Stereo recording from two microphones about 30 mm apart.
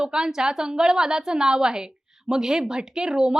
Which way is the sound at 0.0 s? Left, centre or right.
Right.